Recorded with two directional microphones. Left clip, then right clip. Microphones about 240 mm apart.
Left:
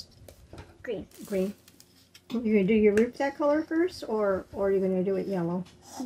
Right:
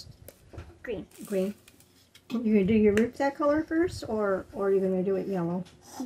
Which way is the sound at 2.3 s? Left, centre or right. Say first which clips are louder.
Left 1 dB; centre.